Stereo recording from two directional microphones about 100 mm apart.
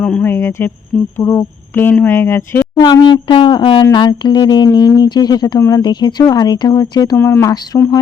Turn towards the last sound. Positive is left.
turn(degrees=30)  # may be behind; listen again after turning